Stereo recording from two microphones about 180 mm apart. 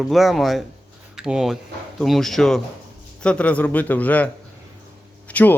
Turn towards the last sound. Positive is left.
turn(degrees=10)  # may be behind; listen again after turning